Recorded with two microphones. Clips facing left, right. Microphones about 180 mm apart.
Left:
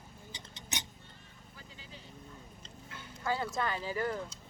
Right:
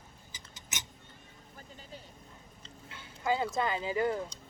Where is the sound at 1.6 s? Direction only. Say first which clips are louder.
Right 4 dB; 45° right (ahead or behind).